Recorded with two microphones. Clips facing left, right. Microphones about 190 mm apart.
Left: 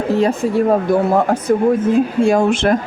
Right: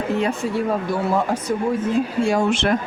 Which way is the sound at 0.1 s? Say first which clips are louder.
Left 8 dB; 40° left (ahead or behind).